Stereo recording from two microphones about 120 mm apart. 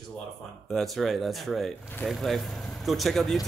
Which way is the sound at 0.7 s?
Centre (ahead or behind).